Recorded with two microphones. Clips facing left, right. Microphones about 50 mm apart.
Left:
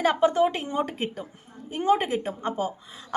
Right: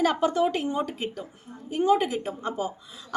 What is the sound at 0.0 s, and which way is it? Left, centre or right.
A woman's voice, left.